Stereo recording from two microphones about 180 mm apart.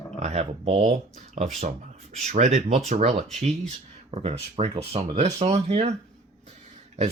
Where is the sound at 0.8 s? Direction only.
45° right (ahead or behind).